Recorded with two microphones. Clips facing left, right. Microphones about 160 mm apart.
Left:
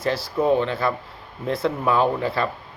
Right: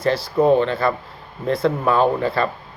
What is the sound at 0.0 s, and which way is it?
Speech, 5° left (ahead or behind).